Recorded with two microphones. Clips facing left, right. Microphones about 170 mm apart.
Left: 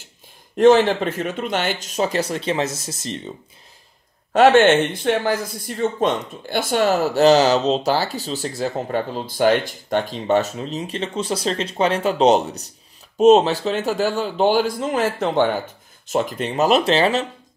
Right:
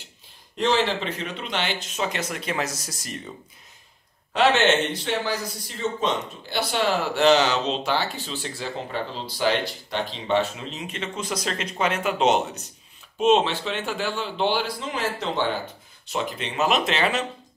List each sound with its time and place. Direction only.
0.6 s speech: 50° left (ahead or behind); by 3.3 s 25° left (ahead or behind)
4.3 s speech: 45° left (ahead or behind)